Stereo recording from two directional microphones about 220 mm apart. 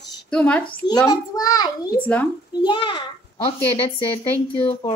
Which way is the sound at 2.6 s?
20° left (ahead or behind).